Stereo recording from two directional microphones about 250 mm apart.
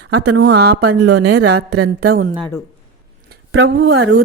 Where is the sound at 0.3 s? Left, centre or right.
Right.